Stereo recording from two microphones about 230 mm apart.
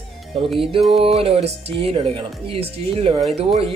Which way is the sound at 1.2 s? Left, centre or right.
Right.